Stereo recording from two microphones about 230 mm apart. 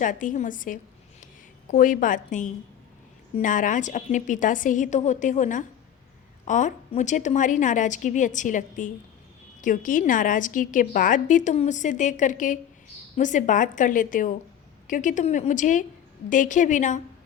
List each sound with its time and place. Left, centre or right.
0.0 s a woman's voice: left